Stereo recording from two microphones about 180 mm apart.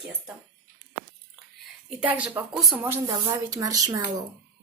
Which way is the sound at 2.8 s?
15° right (ahead or behind).